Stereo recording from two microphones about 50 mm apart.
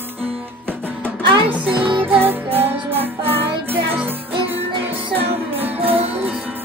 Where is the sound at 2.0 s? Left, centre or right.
Right.